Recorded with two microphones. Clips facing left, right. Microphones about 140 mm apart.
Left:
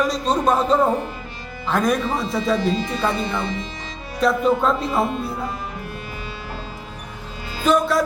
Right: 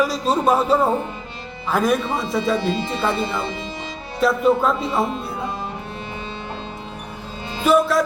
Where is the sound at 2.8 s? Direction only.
25° right (ahead or behind).